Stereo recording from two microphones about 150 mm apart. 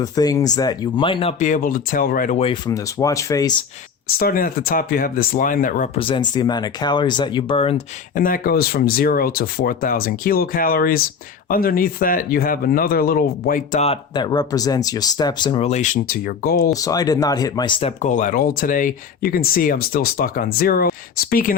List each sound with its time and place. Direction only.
0.0 s speech: 25° left (ahead or behind)
1.4 s speech: 60° left (ahead or behind)
2.6 s speech: 20° left (ahead or behind)
4.2 s speech: 75° left (ahead or behind)
5.9 s speech: 35° left (ahead or behind)
8.1 s speech: 65° left (ahead or behind)
13.8 s speech: 35° left (ahead or behind)
15.6 s speech: 50° left (ahead or behind); by 16.7 s 90° left
16.7 s speech: 25° left (ahead or behind)
18.0 s speech: 60° left (ahead or behind)